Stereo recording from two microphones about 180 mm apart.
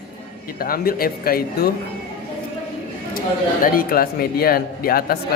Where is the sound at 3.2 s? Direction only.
55° left (ahead or behind).